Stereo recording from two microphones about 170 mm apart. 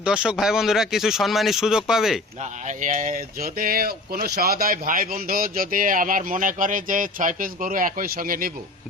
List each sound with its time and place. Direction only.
0.0 s speech: 5° right (ahead or behind)
2.4 s speech: 45° right (ahead or behind)